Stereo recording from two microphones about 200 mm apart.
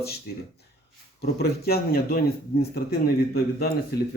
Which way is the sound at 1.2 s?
55° left (ahead or behind).